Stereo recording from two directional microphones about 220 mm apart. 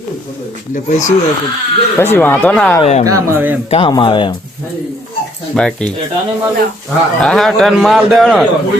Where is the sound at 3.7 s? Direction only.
20° left (ahead or behind).